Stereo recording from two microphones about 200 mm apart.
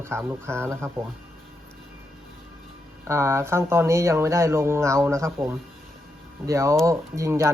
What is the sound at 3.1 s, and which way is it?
Speech, 15° right (ahead or behind).